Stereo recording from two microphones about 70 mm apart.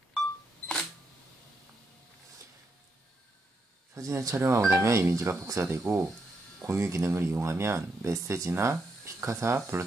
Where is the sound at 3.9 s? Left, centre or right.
Right.